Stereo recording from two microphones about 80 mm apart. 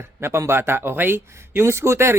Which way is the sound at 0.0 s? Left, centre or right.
Right.